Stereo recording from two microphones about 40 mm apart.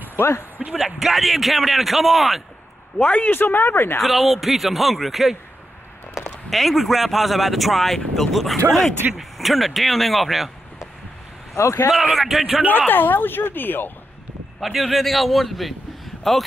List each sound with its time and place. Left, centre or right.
0.2 s speech: right
0.7 s speech: centre
3.0 s speech: left
3.3 s speech: left
4.0 s speech: centre
6.5 s speech: centre
9.0 s speech: right
9.4 s speech: centre
11.9 s speech: centre
12.7 s speech: left
14.6 s speech: centre